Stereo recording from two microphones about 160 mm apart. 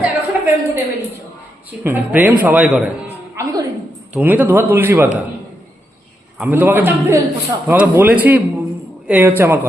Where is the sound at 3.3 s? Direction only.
25° right (ahead or behind).